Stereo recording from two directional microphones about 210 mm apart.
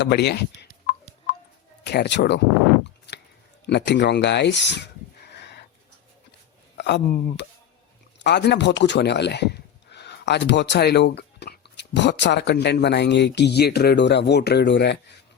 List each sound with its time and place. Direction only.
0.0 s a sound: 50° left (ahead or behind)
1.8 s speech: 55° left (ahead or behind)
3.7 s speech: 55° left (ahead or behind)
6.7 s speech: 55° left (ahead or behind)